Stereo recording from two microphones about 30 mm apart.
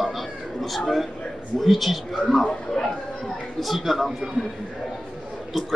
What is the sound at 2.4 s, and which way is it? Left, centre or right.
Speech, left.